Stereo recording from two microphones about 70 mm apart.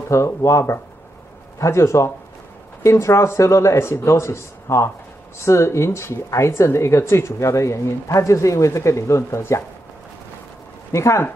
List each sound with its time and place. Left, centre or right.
0.1 s speech: left
10.9 s speech: left